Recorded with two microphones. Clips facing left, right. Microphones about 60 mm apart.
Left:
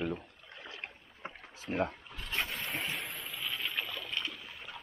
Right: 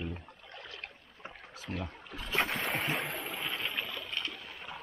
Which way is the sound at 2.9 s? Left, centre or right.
Right.